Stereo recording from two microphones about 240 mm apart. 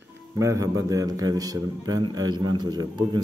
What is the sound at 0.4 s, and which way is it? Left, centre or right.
Speech, centre.